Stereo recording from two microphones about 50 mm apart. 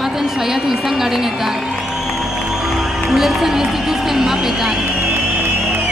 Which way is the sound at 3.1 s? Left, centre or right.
Centre.